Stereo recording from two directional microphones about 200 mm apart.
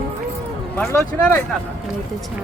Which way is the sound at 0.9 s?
15° left (ahead or behind).